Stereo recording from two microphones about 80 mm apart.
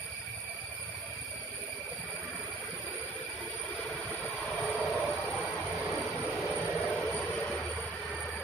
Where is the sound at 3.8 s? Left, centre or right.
Centre.